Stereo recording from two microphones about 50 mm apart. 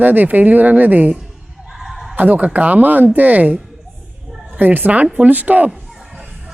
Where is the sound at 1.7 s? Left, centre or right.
Centre.